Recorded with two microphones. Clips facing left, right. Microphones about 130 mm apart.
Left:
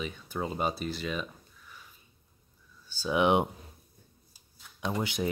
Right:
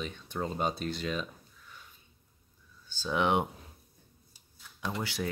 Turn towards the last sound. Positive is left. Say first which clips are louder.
# left 3 dB
turn(degrees=20)  # may be behind; listen again after turning